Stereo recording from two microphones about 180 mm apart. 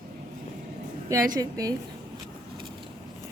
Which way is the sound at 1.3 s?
20° right (ahead or behind).